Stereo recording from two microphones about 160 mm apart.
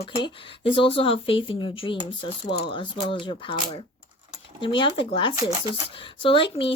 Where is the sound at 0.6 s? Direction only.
35° left (ahead or behind).